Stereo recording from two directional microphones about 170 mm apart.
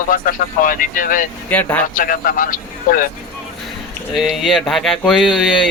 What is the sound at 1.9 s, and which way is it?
Speech, 55° left (ahead or behind).